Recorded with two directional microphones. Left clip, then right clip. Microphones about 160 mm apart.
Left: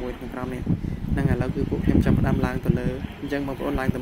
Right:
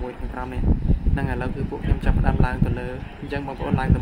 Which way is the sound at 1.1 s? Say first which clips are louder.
Left 3 dB; 15° left (ahead or behind).